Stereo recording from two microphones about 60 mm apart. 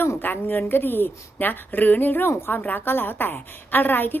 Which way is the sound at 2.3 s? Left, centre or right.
Left.